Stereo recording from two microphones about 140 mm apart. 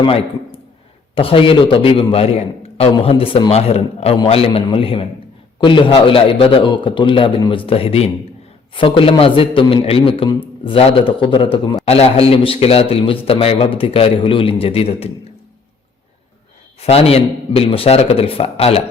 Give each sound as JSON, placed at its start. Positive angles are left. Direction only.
{"t": 0.0, "sound": "a man's voice", "side_deg": 40}
{"t": 16.8, "sound": "a man's voice", "side_deg": 45}